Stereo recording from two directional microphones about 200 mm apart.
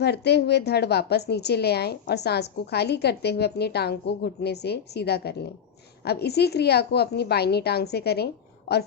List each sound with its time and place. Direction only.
0.0 s a woman's voice: 55° left (ahead or behind)